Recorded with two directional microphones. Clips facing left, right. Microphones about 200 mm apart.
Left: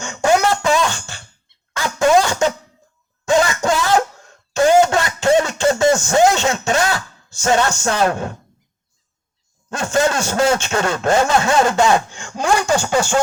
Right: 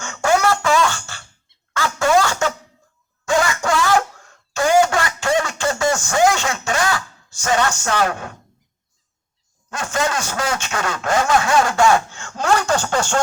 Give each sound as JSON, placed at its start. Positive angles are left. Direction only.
{"t": 0.0, "sound": "music", "side_deg": 15}
{"t": 1.7, "sound": "a sound", "side_deg": 20}
{"t": 9.6, "sound": "a man's voice", "side_deg": 25}